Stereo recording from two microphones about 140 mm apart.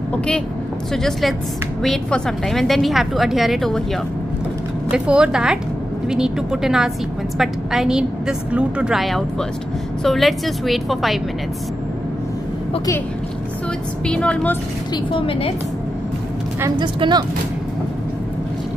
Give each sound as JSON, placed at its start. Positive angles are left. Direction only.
{"t": 0.9, "sound": "a woman's voice", "side_deg": 5}
{"t": 4.9, "sound": "a woman's voice", "side_deg": -5}
{"t": 14.0, "sound": "a woman's voice", "side_deg": 5}
{"t": 15.1, "sound": "a woman's voice", "side_deg": 40}
{"t": 16.7, "sound": "a woman's voice", "side_deg": -35}